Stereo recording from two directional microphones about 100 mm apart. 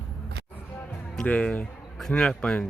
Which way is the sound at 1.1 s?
15° left (ahead or behind).